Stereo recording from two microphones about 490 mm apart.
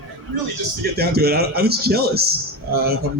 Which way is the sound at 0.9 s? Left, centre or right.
Centre.